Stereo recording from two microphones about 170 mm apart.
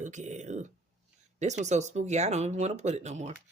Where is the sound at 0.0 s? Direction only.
45° right (ahead or behind).